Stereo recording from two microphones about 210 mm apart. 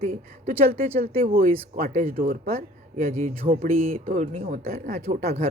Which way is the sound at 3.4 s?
25° right (ahead or behind).